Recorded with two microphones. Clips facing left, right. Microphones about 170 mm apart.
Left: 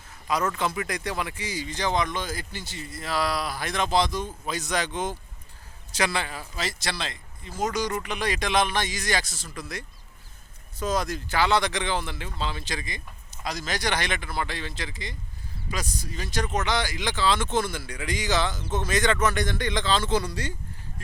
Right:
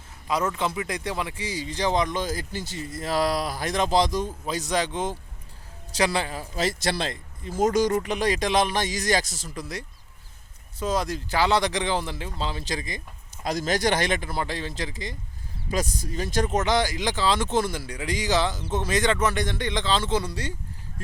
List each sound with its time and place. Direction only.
0.3 s a man's voice: 25° right (ahead or behind)